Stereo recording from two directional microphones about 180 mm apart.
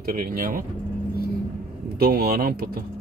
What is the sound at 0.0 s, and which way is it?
Speech, 55° right (ahead or behind).